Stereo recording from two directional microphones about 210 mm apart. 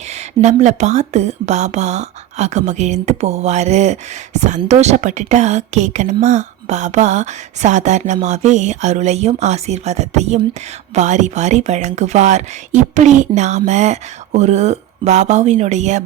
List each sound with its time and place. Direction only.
0.4 s a woman's voice: 35° right (ahead or behind)